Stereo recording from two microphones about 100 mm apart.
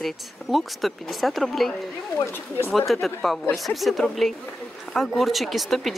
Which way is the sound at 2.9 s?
Centre (ahead or behind).